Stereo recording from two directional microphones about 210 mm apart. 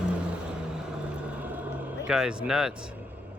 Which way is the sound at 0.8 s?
5° right (ahead or behind).